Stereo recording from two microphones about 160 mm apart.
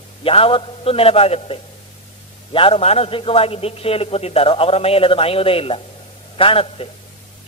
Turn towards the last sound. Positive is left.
turn(degrees=35)  # may be behind; listen again after turning